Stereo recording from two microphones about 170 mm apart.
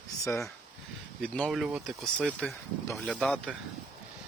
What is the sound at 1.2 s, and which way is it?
Speech, 5° left (ahead or behind).